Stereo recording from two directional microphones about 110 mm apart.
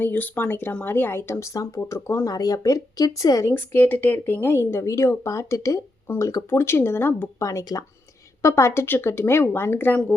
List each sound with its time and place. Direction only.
0.0 s speech: 15° left (ahead or behind)
3.5 s speech: 15° left (ahead or behind)